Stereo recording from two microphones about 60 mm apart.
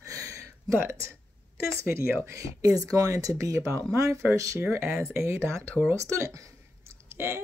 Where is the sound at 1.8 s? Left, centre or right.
Right.